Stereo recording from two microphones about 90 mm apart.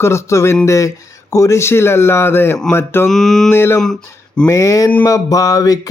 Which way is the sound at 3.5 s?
25° left (ahead or behind).